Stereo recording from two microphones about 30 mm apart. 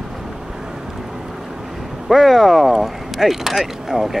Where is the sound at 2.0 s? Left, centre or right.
Centre.